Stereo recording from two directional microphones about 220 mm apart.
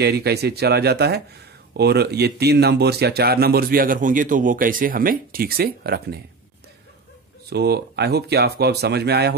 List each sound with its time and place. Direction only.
0.0 s speech: 45° right (ahead or behind)
7.4 s speech: 45° right (ahead or behind)